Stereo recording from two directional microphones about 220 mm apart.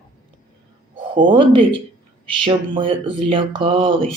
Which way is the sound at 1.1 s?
20° right (ahead or behind).